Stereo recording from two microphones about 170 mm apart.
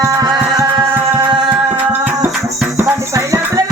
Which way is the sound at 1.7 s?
10° right (ahead or behind).